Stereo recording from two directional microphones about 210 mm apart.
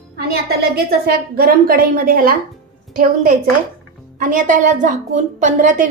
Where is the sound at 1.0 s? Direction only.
45° right (ahead or behind).